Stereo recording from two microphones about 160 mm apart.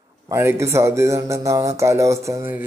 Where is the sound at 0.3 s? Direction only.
15° right (ahead or behind).